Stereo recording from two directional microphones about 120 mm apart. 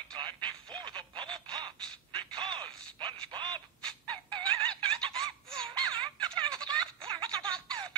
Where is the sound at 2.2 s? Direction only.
45° right (ahead or behind).